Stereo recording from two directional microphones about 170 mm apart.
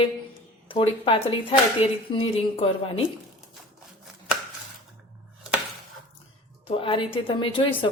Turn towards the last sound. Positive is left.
turn(degrees=30)  # may be behind; listen again after turning